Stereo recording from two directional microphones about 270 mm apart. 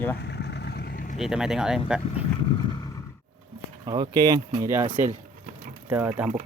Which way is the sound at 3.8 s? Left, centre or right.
Centre.